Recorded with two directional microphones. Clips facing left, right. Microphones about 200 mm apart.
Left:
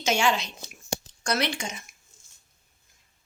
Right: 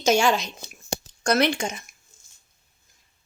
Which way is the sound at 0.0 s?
40° right (ahead or behind).